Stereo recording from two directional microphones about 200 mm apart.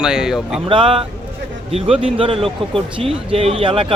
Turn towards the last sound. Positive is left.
turn(degrees=-25)  # may be behind; listen again after turning